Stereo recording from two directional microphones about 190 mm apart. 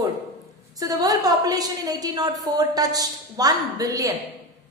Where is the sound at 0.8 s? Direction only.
20° right (ahead or behind).